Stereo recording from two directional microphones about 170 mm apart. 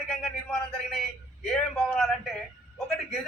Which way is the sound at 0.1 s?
5° left (ahead or behind).